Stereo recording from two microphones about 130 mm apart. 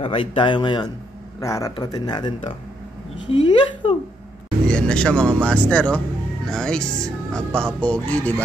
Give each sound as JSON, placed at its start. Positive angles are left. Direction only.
{"t": 0.0, "sound": "speech", "side_deg": 45}
{"t": 1.4, "sound": "speech", "side_deg": 25}
{"t": 3.3, "sound": "a sound", "side_deg": 45}
{"t": 4.6, "sound": "speech", "side_deg": 10}